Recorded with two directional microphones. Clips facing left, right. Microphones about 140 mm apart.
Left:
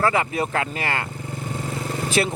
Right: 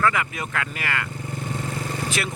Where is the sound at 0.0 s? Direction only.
30° left (ahead or behind).